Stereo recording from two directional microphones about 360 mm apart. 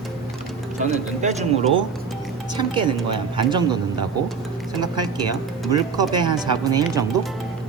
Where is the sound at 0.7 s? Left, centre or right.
Centre.